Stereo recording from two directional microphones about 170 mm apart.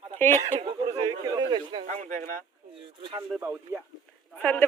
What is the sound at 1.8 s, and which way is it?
Speech, 45° right (ahead or behind).